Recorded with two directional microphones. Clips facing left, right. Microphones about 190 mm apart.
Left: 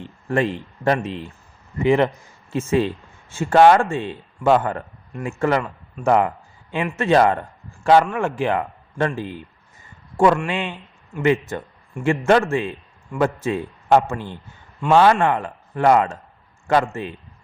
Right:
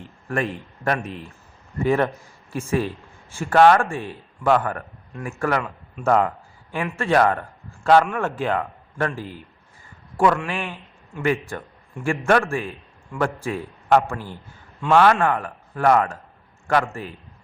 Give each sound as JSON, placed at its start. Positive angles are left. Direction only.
{"t": 0.3, "sound": "speech", "side_deg": 30}
{"t": 2.5, "sound": "speech", "side_deg": 25}
{"t": 6.0, "sound": "a man's voice", "side_deg": 10}